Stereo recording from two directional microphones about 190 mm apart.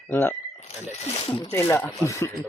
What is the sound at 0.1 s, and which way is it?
Speech, 10° left (ahead or behind).